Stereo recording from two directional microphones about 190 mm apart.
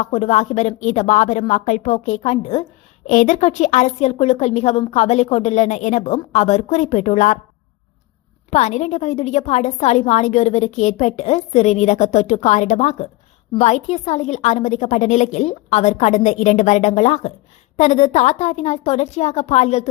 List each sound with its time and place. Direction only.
0.0 s a woman's voice: 35° left (ahead or behind)
8.4 s a woman's voice: 35° left (ahead or behind)